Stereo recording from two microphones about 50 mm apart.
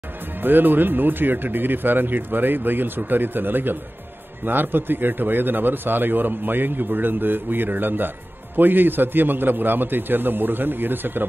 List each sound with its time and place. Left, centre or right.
0.4 s a man's voice: right